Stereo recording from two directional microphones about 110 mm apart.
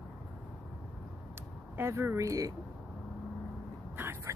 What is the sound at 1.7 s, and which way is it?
Speech, 20° right (ahead or behind).